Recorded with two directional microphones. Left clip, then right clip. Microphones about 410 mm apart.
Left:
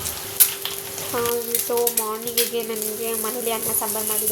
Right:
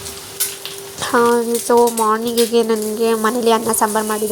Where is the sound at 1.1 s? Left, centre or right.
Left.